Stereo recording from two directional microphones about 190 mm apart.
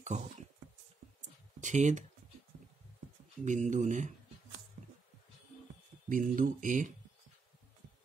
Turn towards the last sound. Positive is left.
turn(degrees=-40)  # may be behind; listen again after turning